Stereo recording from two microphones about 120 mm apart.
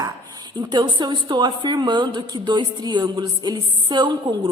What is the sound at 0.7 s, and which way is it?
A woman's voice, 35° right (ahead or behind).